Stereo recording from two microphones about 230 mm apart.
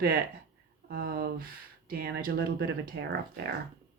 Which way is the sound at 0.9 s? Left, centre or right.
Right.